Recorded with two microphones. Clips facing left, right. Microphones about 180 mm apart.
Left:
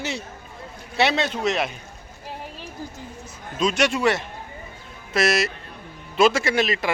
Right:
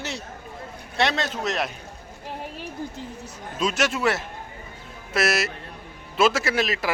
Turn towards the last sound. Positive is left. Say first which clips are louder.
# left 2 dB
turn(degrees=0)  # may be behind; listen again after turning